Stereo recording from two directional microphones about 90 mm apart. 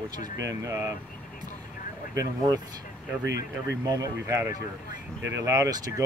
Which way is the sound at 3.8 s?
40° right (ahead or behind).